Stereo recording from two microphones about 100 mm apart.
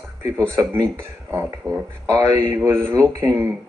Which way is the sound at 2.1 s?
40° right (ahead or behind).